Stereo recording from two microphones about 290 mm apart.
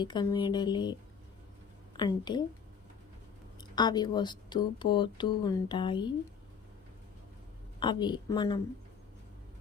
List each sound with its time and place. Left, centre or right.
0.0 s speech: centre
2.0 s speech: centre
3.6 s speech: centre
7.8 s speech: centre